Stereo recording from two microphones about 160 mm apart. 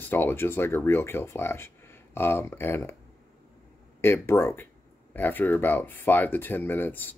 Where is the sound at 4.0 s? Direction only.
15° left (ahead or behind).